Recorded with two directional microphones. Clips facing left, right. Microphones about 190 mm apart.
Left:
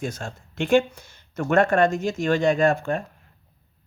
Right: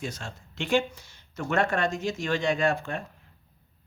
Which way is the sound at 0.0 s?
50° left (ahead or behind).